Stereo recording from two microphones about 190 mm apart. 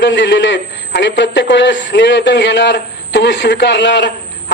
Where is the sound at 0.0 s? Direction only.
65° left (ahead or behind).